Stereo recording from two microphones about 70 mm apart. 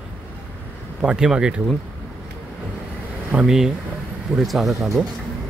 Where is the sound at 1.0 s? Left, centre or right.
Centre.